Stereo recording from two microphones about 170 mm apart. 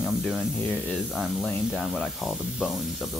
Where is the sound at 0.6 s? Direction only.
10° left (ahead or behind).